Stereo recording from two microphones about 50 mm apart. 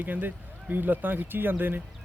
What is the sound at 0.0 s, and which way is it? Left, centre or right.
Speech, right.